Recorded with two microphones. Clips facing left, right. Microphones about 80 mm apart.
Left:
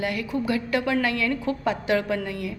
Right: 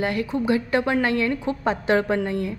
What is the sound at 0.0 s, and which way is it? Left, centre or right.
A woman's voice, right.